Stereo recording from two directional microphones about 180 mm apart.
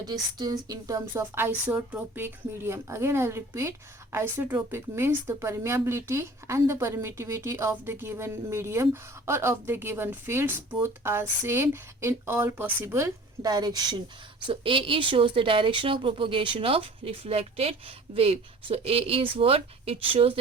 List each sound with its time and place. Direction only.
0.0 s a woman's voice: 20° right (ahead or behind)